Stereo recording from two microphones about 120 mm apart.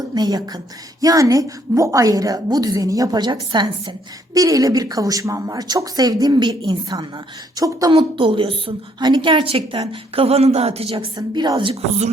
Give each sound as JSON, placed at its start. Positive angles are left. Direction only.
{"t": 0.1, "sound": "a woman's voice", "side_deg": -35}
{"t": 7.9, "sound": "a woman's voice", "side_deg": -45}